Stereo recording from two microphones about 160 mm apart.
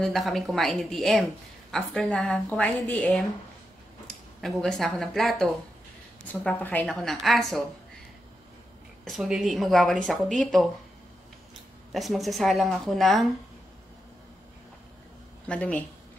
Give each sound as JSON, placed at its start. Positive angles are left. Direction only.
{"t": 0.0, "sound": "speech", "side_deg": 0}
{"t": 4.4, "sound": "speech", "side_deg": 5}
{"t": 9.0, "sound": "speech", "side_deg": 0}
{"t": 11.9, "sound": "speech", "side_deg": 0}
{"t": 15.4, "sound": "speech", "side_deg": 5}